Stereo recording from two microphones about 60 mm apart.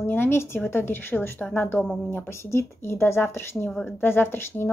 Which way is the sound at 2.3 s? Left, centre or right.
Left.